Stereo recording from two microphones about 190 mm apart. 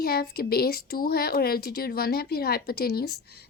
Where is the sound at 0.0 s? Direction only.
55° left (ahead or behind).